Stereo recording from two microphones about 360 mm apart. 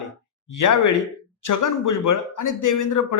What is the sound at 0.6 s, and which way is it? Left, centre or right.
Speech, left.